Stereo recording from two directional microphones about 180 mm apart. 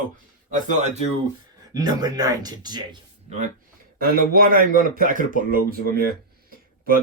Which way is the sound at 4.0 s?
55° right (ahead or behind).